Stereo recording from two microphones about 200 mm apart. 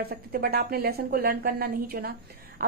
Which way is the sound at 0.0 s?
50° right (ahead or behind).